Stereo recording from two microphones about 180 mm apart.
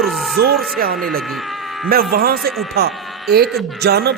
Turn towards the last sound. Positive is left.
turn(degrees=-65)  # may be behind; listen again after turning